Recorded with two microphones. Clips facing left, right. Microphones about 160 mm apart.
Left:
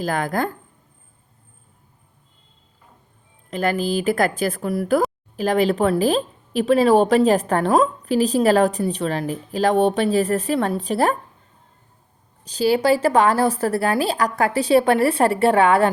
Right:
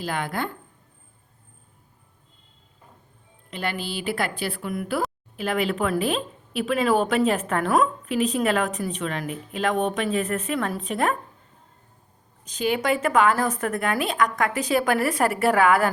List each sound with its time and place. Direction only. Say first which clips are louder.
0.0 s a woman's voice: left 6 dB; 45° left (ahead or behind)
3.5 s a woman's voice: left 9 dB; 45° left (ahead or behind)
12.5 s a woman's voice: left 6 dB; 35° left (ahead or behind)